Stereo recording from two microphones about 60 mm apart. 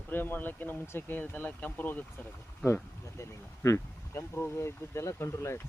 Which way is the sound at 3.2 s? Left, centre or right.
Left.